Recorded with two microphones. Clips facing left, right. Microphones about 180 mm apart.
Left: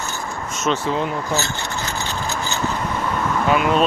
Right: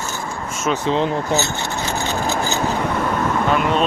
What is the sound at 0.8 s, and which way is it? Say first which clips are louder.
Speech: right 3 dB; 25° right (ahead or behind).